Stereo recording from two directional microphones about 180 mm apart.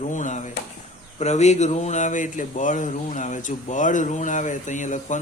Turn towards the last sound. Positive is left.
turn(degrees=45)  # may be behind; listen again after turning